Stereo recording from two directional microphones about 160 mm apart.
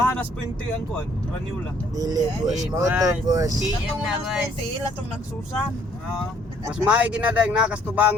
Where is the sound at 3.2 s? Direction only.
20° right (ahead or behind).